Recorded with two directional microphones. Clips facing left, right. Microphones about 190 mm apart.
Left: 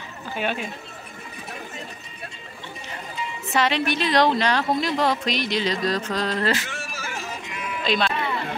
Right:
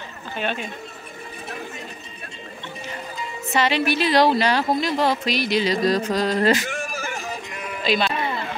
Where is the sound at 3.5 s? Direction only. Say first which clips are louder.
Right 2 dB; centre (ahead or behind).